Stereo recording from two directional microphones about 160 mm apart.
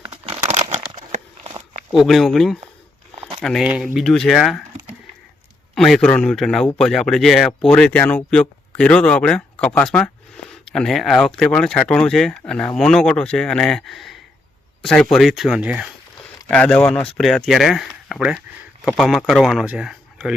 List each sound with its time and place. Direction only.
0.1 s crumpling: 35° right (ahead or behind)
0.9 s a sound: 50° right (ahead or behind)
1.9 s speech: centre (ahead or behind)
3.2 s a sound: 35° right (ahead or behind)
3.4 s speech: 5° left (ahead or behind)
16.5 s speech: 5° left (ahead or behind)